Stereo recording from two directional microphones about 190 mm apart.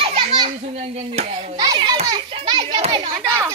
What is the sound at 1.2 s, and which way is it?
Hands, 35° right (ahead or behind).